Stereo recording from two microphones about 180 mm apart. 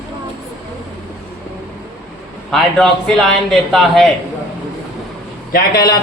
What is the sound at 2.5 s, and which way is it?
A man's voice, 5° left (ahead or behind).